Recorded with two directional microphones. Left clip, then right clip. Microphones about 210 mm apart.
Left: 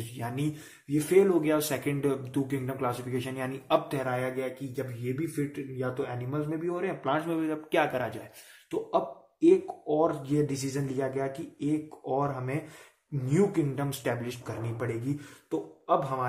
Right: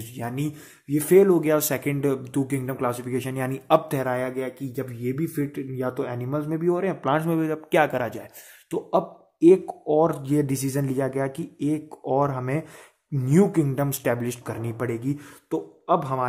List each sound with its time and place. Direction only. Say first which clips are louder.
0.1 s speech: right 4 dB; 50° right (ahead or behind)